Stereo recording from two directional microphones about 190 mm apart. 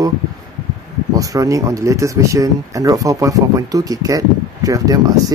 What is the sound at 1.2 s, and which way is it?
Speech, 20° right (ahead or behind).